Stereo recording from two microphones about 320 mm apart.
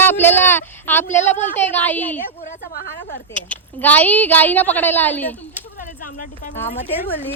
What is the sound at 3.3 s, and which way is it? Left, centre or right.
A woman's voice, centre.